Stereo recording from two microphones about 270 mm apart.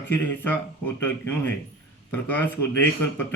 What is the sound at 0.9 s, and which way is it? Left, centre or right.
A man's voice, centre.